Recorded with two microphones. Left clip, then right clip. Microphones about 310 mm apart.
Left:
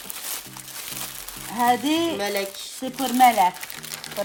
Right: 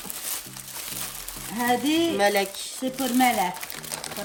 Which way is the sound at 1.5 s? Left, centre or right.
Centre.